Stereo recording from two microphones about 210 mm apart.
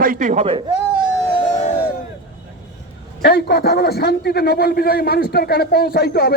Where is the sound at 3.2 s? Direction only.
50° left (ahead or behind).